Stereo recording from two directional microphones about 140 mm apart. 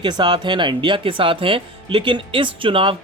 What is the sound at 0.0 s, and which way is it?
Speech, 30° right (ahead or behind).